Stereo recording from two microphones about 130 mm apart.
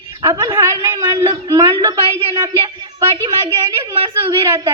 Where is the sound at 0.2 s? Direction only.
40° right (ahead or behind).